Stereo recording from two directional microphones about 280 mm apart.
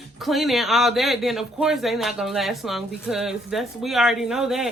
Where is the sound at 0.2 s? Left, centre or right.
Centre.